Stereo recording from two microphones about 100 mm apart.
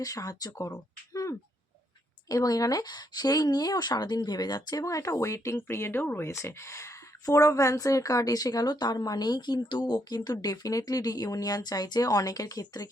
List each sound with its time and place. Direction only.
0.0 s a woman's voice: 35° left (ahead or behind)
1.1 s a sound: 35° left (ahead or behind)
2.3 s a woman's voice: 40° left (ahead or behind)